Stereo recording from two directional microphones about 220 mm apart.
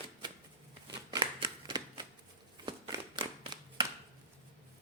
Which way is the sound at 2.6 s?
20° right (ahead or behind).